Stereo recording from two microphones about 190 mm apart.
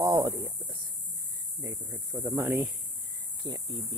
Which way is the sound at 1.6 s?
15° right (ahead or behind).